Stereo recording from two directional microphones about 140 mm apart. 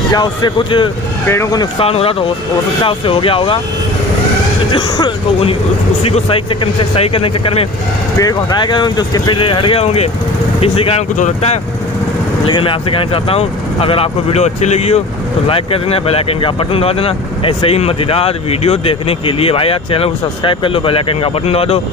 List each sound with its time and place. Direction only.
0.1 s speech: 30° left (ahead or behind)
1.2 s speech: 20° left (ahead or behind)
1.8 s speech: 45° left (ahead or behind)
4.7 s speech: 35° left (ahead or behind)
8.2 s speech: 30° left (ahead or behind); by 11.1 s 45° left (ahead or behind)
11.1 s speech: 55° left (ahead or behind)
12.4 s speech: 35° left (ahead or behind)